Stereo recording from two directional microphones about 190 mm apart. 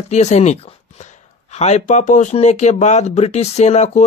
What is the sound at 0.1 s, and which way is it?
Speech, 35° left (ahead or behind).